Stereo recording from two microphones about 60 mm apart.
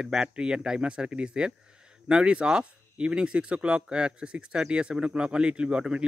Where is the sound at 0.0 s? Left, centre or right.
Centre.